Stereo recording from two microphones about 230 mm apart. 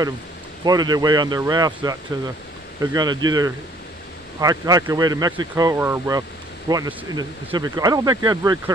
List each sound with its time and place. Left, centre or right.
0.7 s speech: centre